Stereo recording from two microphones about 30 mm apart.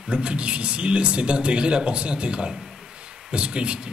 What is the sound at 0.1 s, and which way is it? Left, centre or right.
A man's voice, right.